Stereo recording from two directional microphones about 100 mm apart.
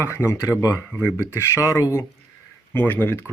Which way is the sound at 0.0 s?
25° left (ahead or behind).